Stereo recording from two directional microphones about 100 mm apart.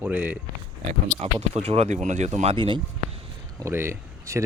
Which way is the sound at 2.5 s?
55° right (ahead or behind).